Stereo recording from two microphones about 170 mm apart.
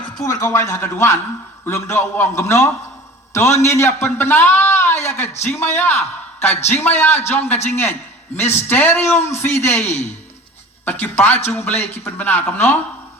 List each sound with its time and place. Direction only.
0.3 s a man's voice: 15° left (ahead or behind)
5.0 s a sound: 15° left (ahead or behind)
5.4 s a man's voice: 10° left (ahead or behind)